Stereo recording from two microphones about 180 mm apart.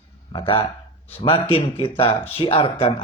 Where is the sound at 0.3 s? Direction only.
30° left (ahead or behind).